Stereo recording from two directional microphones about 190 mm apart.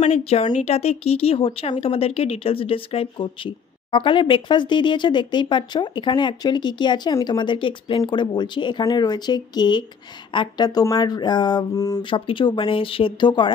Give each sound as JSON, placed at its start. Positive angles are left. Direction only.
{"t": 0.0, "sound": "speech", "side_deg": 35}